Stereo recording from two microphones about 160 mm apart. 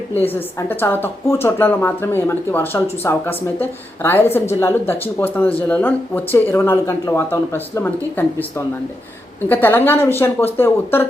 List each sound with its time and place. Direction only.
0.3 s speech: 15° left (ahead or behind)